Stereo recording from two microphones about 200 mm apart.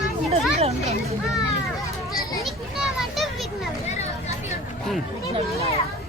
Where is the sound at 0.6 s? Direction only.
30° right (ahead or behind).